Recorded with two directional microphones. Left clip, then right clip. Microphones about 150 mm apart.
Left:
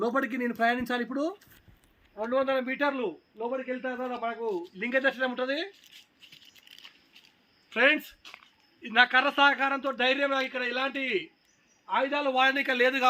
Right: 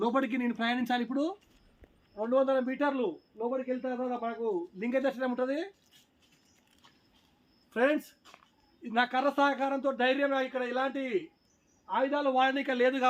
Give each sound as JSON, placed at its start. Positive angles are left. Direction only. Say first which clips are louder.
{"t": 0.0, "sound": "a man's voice", "louder": "left 1 dB", "side_deg": 15}
{"t": 1.1, "sound": "a man's voice", "louder": "left 1 dB", "side_deg": 10}
{"t": 4.4, "sound": "speech", "louder": "even", "side_deg": 25}
{"t": 4.8, "sound": "speech", "louder": "left 5 dB", "side_deg": -5}
{"t": 7.7, "sound": "a man's voice", "louder": "left 4 dB", "side_deg": 0}
{"t": 9.9, "sound": "a man's voice", "louder": "even", "side_deg": 10}
{"t": 11.9, "sound": "a man's voice", "louder": "left 2 dB", "side_deg": 20}